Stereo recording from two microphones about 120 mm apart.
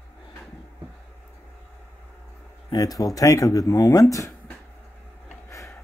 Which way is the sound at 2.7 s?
30° left (ahead or behind).